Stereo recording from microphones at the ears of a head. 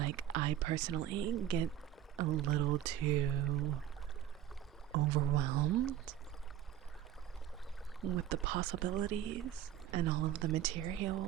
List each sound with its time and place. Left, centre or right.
0.0 s speech: right
4.9 s speech: right
8.0 s speech: right